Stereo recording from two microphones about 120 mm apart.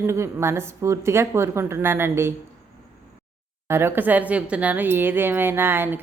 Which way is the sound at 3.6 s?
20° right (ahead or behind).